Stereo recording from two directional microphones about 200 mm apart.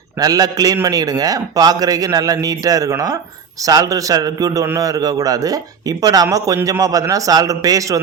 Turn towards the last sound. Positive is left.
turn(degrees=-15)  # may be behind; listen again after turning